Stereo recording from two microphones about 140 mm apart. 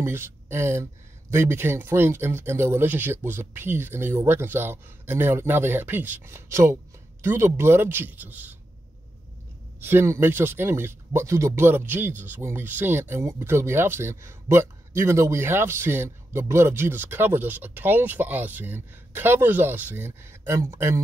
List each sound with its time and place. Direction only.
0.0 s a man's voice: 15° right (ahead or behind)
9.8 s a man's voice: 15° right (ahead or behind)